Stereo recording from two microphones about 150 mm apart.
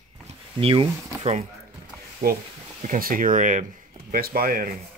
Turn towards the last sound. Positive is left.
turn(degrees=-70)  # may be behind; listen again after turning